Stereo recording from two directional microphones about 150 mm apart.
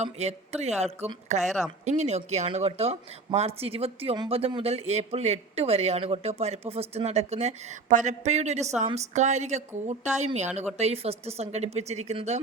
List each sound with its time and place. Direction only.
0.0 s speech: 45° right (ahead or behind)
1.5 s speech: centre (ahead or behind)
1.8 s speech: 50° right (ahead or behind)